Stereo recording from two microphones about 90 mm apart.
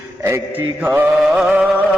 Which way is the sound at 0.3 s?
30° right (ahead or behind).